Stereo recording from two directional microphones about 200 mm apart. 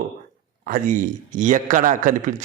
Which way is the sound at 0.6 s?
40° right (ahead or behind).